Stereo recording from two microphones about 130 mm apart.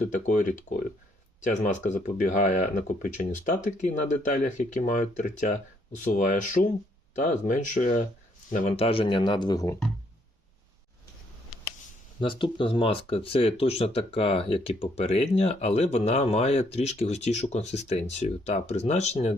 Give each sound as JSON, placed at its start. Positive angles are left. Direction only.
{"t": 0.0, "sound": "speech", "side_deg": 75}
{"t": 8.7, "sound": "speech", "side_deg": 50}
{"t": 12.2, "sound": "speech", "side_deg": 40}